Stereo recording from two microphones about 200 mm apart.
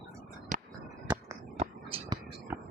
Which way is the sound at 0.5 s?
40° right (ahead or behind).